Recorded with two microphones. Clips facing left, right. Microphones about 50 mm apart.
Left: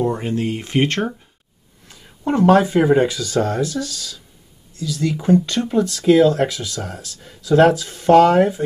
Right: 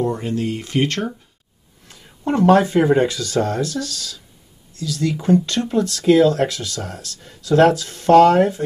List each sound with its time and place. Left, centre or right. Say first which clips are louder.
0.0 s speech: left 1 dB; left
1.9 s speech: left 1 dB; centre